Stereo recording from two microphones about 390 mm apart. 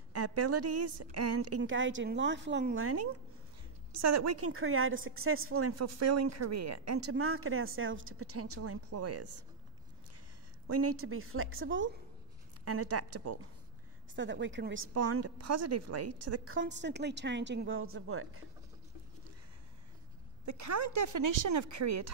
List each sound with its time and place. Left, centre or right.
0.1 s a woman's voice: right
10.7 s a woman's voice: right
20.4 s speech: right